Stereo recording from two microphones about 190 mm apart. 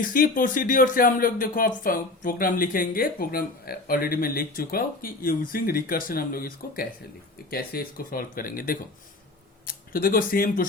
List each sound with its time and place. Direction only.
0.0 s speech: 45° left (ahead or behind)